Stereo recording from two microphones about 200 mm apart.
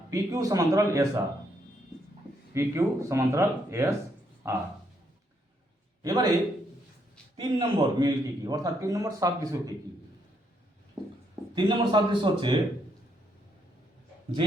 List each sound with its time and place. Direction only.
0.1 s a man's voice: 15° right (ahead or behind)
2.5 s a man's voice: 15° right (ahead or behind)
6.0 s a man's voice: 20° right (ahead or behind)
7.3 s a man's voice: 20° right (ahead or behind)
11.5 s a man's voice: 25° right (ahead or behind)